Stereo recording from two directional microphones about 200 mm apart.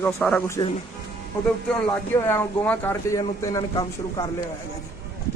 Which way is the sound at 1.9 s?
10° left (ahead or behind).